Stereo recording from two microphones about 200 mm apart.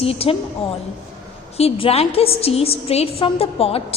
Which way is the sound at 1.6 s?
30° left (ahead or behind).